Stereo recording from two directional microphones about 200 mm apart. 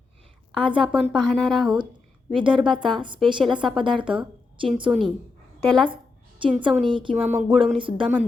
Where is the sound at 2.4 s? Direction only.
25° right (ahead or behind).